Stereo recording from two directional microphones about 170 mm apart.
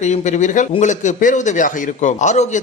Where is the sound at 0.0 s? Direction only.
45° left (ahead or behind).